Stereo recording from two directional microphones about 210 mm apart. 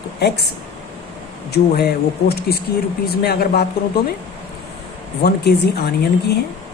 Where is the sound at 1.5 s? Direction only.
50° left (ahead or behind).